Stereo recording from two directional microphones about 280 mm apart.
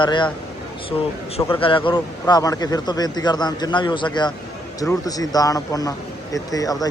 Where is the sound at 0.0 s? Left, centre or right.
Centre.